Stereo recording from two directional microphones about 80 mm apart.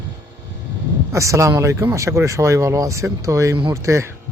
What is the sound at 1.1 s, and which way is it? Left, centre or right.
Speech, right.